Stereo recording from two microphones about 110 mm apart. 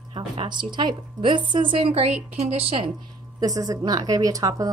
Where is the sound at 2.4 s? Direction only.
80° right.